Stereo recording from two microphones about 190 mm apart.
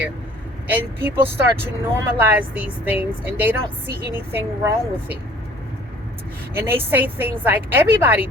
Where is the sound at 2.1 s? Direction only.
10° right (ahead or behind).